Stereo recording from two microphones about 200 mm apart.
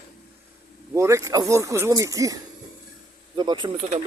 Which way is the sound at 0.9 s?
15° right (ahead or behind).